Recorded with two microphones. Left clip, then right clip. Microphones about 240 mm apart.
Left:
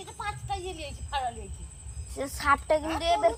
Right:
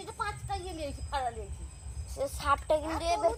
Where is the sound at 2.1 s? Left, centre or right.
Right.